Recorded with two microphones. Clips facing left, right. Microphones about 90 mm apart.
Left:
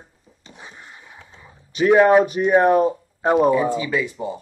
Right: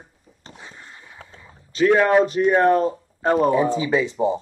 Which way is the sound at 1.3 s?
20° left (ahead or behind).